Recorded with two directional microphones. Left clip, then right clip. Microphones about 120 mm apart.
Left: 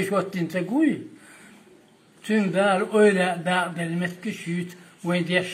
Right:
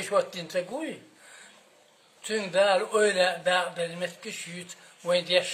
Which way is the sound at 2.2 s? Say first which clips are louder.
Left 2 dB; 25° right (ahead or behind).